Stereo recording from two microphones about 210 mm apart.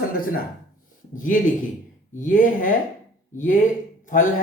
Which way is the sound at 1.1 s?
40° left (ahead or behind).